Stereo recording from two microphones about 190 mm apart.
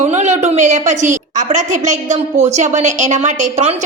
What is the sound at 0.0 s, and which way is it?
A woman's voice, 35° right (ahead or behind).